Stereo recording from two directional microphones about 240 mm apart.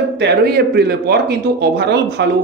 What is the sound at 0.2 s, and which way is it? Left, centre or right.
Speech, right.